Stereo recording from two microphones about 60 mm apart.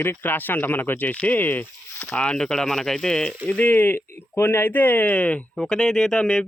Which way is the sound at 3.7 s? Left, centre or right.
Left.